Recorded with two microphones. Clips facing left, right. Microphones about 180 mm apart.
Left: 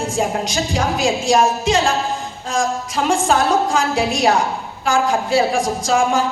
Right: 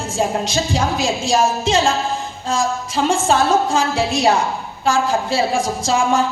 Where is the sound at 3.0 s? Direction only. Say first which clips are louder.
Even; 30° right (ahead or behind).